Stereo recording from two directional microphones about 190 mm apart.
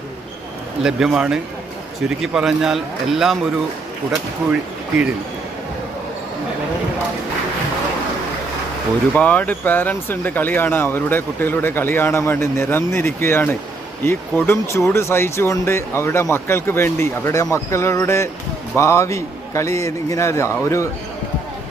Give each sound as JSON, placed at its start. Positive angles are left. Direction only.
{"t": 0.8, "sound": "a man's voice", "side_deg": -5}
{"t": 9.1, "sound": "speech", "side_deg": 5}